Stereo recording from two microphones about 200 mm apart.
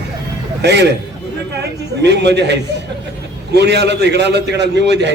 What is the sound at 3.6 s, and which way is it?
A man's voice, 55° right (ahead or behind).